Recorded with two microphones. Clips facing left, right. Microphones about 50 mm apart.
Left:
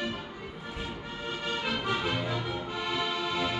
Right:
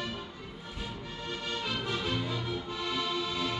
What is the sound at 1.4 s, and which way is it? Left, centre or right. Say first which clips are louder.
Music: left 3 dB; left.